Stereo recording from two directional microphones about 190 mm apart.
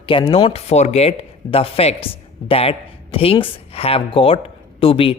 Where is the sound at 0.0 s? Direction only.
25° left (ahead or behind).